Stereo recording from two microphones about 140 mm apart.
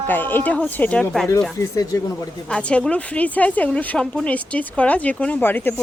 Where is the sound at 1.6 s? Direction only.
20° left (ahead or behind).